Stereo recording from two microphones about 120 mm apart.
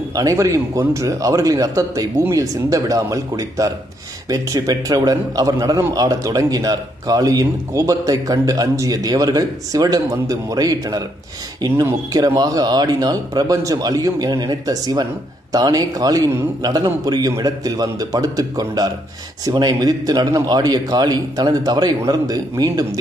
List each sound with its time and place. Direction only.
0.1 s a man's voice: 30° right (ahead or behind)